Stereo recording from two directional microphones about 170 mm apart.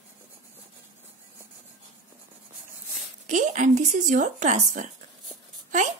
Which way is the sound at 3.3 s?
45° right (ahead or behind).